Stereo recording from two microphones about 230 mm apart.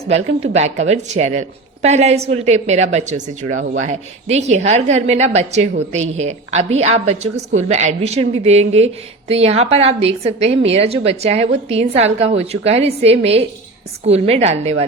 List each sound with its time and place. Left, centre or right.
0.1 s a woman's voice: right